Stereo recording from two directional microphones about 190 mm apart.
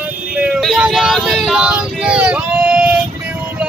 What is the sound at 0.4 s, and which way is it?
Male singing, 5° right (ahead or behind).